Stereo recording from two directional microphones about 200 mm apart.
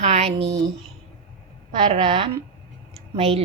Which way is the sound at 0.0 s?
35° right (ahead or behind).